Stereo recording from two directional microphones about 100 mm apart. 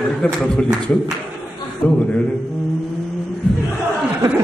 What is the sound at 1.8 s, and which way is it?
Speech, 15° left (ahead or behind).